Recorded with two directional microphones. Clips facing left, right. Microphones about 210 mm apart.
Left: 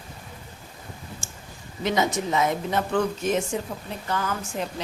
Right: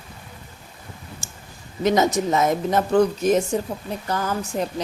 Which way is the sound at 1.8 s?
40° right (ahead or behind).